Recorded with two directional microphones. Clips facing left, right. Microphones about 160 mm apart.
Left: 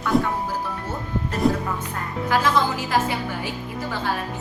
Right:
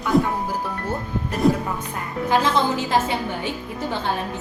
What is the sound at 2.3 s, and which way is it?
A woman's voice, 25° right (ahead or behind).